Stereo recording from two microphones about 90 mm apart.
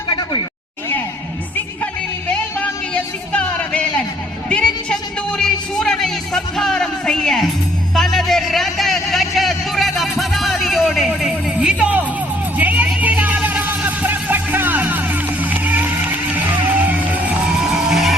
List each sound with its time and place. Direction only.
2.3 s music: 15° left (ahead or behind)
7.9 s a sound: 5° left (ahead or behind)
11.5 s music: 15° right (ahead or behind)
12.5 s vehicle: 15° right (ahead or behind)
13.0 s music: 20° right (ahead or behind)
17.6 s music: 5° right (ahead or behind)